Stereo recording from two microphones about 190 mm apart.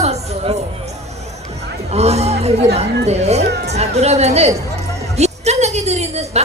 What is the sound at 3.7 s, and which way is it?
Speech, 35° right (ahead or behind).